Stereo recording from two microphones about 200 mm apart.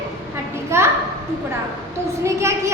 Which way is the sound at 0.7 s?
10° right (ahead or behind).